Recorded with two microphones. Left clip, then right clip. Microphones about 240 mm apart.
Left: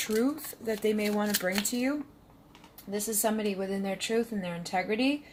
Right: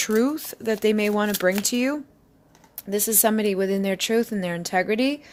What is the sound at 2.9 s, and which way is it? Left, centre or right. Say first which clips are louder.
Speech: right 8 dB; right.